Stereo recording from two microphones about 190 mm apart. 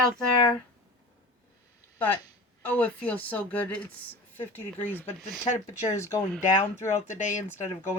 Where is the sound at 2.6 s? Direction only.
10° left (ahead or behind).